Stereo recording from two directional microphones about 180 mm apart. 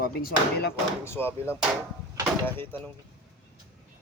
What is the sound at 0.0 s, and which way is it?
Speech, 55° left (ahead or behind).